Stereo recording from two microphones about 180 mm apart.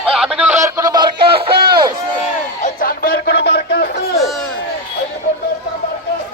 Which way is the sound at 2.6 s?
55° left (ahead or behind).